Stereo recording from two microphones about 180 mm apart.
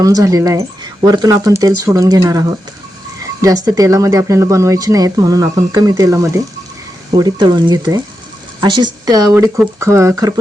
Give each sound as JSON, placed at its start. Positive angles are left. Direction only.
{"t": 0.0, "sound": "speech", "side_deg": -20}
{"t": 3.4, "sound": "speech", "side_deg": -20}